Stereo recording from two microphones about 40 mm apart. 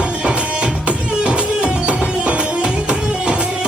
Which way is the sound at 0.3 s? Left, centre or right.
Right.